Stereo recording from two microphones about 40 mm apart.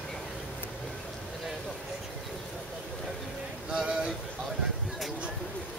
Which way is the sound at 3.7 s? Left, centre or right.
Centre.